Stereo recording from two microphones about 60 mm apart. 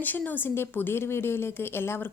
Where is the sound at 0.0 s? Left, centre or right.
Left.